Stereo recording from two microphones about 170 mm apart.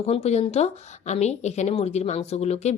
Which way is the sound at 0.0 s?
35° left (ahead or behind).